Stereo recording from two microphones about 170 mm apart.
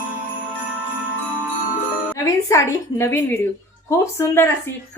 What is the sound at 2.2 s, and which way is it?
A woman's voice, 20° left (ahead or behind).